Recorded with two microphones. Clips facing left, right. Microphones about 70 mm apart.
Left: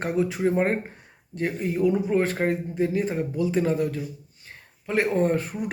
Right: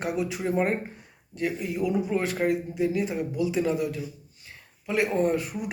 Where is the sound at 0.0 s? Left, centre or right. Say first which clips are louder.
Left 4 dB; left.